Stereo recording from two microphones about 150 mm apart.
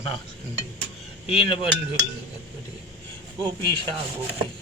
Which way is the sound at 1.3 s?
40° left (ahead or behind).